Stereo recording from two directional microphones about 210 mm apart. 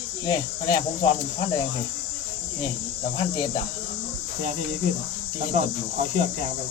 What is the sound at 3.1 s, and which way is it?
Speech, 25° left (ahead or behind).